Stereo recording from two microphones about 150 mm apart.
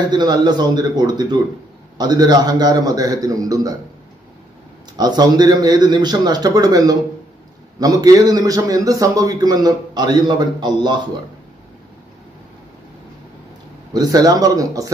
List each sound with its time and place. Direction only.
0.1 s a man's voice: 30° right (ahead or behind)
4.9 s a man's voice: 25° right (ahead or behind)
13.9 s a man's voice: 25° right (ahead or behind)